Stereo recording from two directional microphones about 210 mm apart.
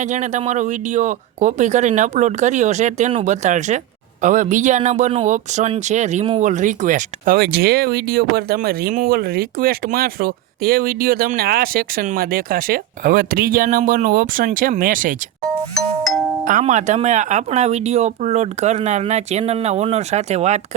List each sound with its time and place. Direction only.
0.0 s a man's voice: 35° right (ahead or behind)
15.4 s music: 5° left (ahead or behind)
16.4 s speech: 40° right (ahead or behind)